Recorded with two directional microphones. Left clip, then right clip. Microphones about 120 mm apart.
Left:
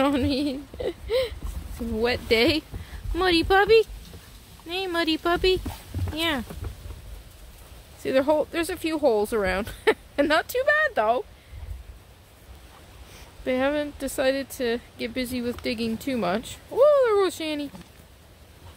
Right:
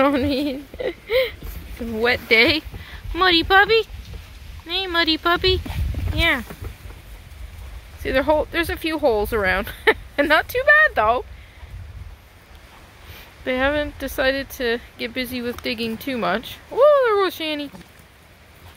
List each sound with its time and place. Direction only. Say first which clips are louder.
0.0 s a woman's voice: right 5 dB; 20° left (ahead or behind)
6.1 s speech: right 7 dB; 45° left (ahead or behind)
8.0 s speech: right 3 dB; 25° left (ahead or behind)
13.4 s speech: right 4 dB; 15° left (ahead or behind)